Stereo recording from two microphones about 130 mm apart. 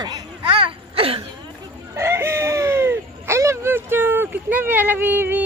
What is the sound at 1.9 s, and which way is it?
Speech, 20° right (ahead or behind).